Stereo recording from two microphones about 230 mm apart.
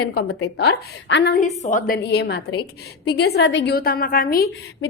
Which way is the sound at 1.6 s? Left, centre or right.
Left.